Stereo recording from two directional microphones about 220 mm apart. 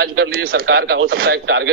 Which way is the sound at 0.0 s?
45° right (ahead or behind).